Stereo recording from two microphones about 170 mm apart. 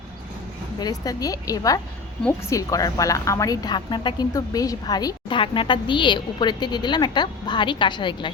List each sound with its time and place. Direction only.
0.8 s speech: 20° left (ahead or behind)